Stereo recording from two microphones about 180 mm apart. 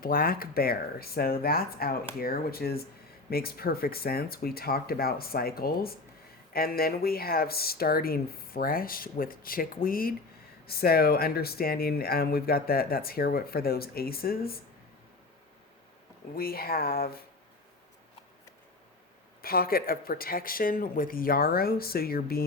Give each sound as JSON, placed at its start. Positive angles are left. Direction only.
{"t": 0.0, "sound": "speech", "side_deg": 55}
{"t": 16.3, "sound": "speech", "side_deg": 55}
{"t": 19.4, "sound": "speech", "side_deg": 55}